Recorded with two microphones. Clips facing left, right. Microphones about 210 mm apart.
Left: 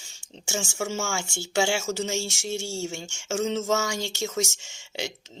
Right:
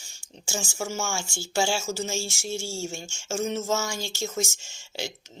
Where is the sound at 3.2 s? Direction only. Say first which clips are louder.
Left 2 dB; 85° left.